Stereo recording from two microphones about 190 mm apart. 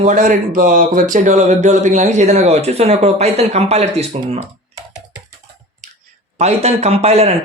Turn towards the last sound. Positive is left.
turn(degrees=-35)  # may be behind; listen again after turning